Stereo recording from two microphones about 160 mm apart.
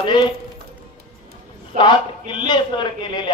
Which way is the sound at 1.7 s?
30° left (ahead or behind).